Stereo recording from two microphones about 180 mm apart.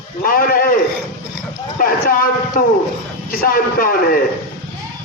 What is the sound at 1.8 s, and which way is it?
A man's voice, 50° left (ahead or behind).